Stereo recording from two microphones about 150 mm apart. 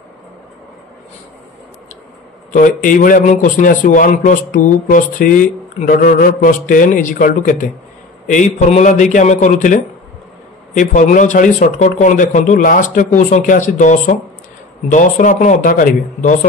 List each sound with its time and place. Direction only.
2.8 s a man's voice: 65° left (ahead or behind)